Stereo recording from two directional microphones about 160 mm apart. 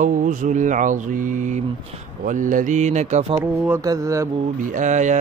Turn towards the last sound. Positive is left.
turn(degrees=-50)  # may be behind; listen again after turning